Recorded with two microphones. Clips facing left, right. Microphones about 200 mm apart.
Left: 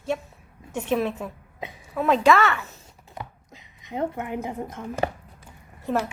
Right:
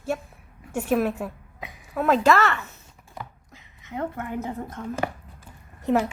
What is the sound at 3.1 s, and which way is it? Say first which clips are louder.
Chopping: left 1 dB; 20° left (ahead or behind).